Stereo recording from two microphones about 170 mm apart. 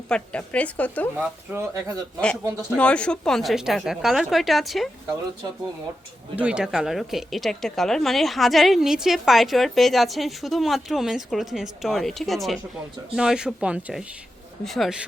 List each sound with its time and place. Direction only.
0.1 s a woman's voice: 5° left (ahead or behind)
1.2 s speech: 10° right (ahead or behind)
2.7 s speech: 5° left (ahead or behind)
6.3 s speech: 5° right (ahead or behind)